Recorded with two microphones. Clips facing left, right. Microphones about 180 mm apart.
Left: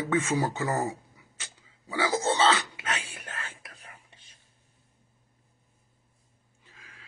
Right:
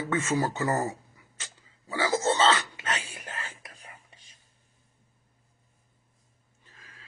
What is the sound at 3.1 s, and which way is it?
Whispering, 35° right (ahead or behind).